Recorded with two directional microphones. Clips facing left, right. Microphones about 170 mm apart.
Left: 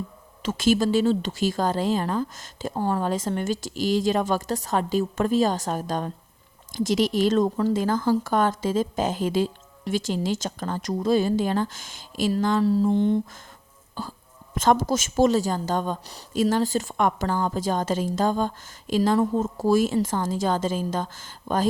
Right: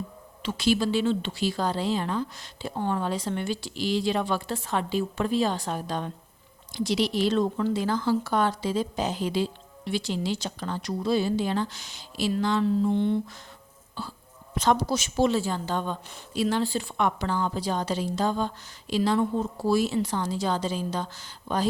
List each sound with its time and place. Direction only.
0.4 s a woman's voice: 45° left (ahead or behind)